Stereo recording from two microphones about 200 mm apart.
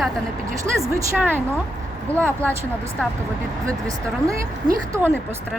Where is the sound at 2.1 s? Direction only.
10° left (ahead or behind).